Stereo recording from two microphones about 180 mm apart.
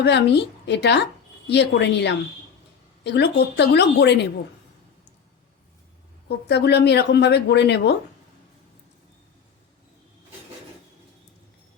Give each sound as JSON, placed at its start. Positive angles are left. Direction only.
{"t": 0.0, "sound": "speech", "side_deg": 70}
{"t": 6.2, "sound": "speech", "side_deg": 70}